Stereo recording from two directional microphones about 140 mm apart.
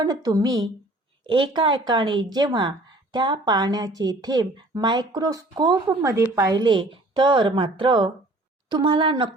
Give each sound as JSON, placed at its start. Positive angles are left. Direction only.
{"t": 0.0, "sound": "speech", "side_deg": -30}